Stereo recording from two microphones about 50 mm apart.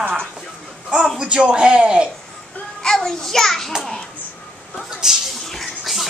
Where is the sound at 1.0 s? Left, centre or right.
Centre.